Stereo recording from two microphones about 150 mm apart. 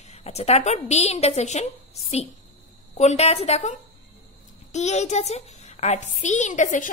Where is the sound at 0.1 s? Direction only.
45° left (ahead or behind).